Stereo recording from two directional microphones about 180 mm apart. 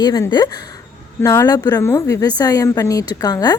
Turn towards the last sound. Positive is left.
turn(degrees=20)  # may be behind; listen again after turning